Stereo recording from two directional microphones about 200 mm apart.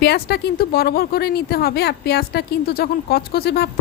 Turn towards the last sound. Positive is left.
turn(degrees=50)  # may be behind; listen again after turning